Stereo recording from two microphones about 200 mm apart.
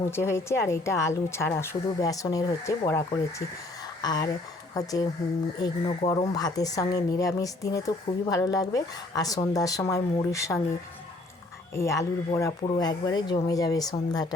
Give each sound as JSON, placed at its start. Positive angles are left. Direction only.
{"t": 0.1, "sound": "a woman's voice", "side_deg": 15}
{"t": 6.1, "sound": "a woman's voice", "side_deg": 20}
{"t": 11.7, "sound": "a woman's voice", "side_deg": 15}